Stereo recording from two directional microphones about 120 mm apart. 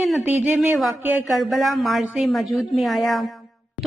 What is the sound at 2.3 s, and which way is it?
Speech, centre (ahead or behind).